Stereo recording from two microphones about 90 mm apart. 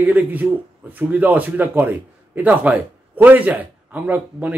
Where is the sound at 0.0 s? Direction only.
20° right (ahead or behind).